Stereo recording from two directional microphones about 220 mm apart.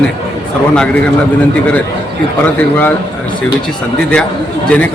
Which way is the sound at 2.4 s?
10° left (ahead or behind).